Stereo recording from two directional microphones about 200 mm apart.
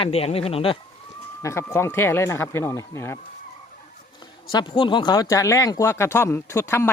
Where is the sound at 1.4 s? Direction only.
15° left (ahead or behind).